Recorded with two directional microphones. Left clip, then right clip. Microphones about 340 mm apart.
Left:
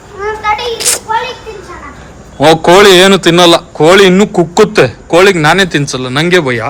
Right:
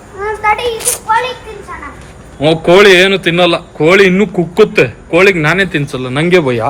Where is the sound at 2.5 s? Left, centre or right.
Centre.